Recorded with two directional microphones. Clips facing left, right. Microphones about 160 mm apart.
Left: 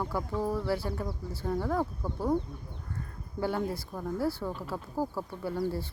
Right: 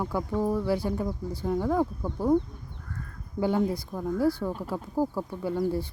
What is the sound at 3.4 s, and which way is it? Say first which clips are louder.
Speech: right 5 dB; 15° right (ahead or behind).